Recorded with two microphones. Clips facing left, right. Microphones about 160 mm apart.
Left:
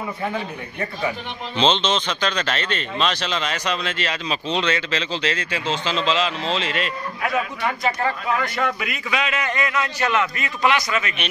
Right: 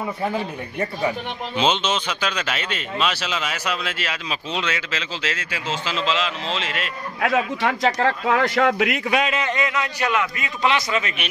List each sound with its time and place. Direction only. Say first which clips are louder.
1.6 s speech: left 2 dB; 10° right (ahead or behind)
7.2 s a man's voice: right 4 dB; 90° right
9.3 s a man's voice: right 1 dB; 20° right (ahead or behind)